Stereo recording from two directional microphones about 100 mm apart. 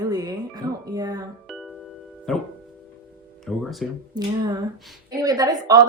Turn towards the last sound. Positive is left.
turn(degrees=-35)  # may be behind; listen again after turning